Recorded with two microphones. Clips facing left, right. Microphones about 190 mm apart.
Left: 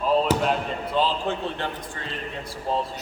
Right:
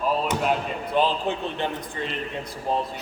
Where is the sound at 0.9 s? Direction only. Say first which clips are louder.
Right 2 dB; 15° right (ahead or behind).